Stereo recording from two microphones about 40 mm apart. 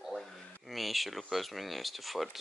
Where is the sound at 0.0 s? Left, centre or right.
Centre.